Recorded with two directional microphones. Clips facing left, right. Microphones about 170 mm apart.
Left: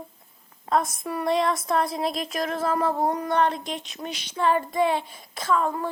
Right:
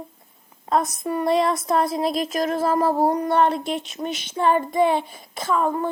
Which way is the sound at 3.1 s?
25° right (ahead or behind).